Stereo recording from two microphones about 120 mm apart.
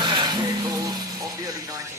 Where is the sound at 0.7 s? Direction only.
30° right (ahead or behind).